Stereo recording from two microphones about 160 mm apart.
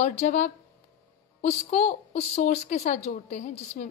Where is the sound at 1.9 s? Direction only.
40° left (ahead or behind).